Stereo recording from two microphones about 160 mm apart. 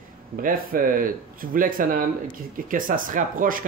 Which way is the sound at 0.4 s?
60° right (ahead or behind).